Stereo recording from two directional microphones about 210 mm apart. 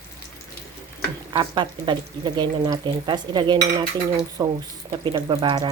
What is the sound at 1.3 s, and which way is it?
Speech, 20° right (ahead or behind).